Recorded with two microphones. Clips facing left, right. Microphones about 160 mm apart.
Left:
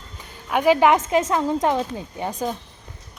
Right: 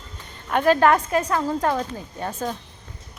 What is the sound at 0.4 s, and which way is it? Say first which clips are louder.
A woman's voice: left 1 dB; 10° left (ahead or behind).